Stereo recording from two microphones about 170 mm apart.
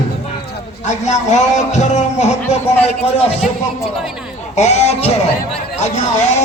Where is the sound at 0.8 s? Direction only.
45° left (ahead or behind).